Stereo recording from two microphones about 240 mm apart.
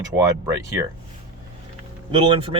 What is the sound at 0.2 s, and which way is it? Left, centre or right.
Speech, centre.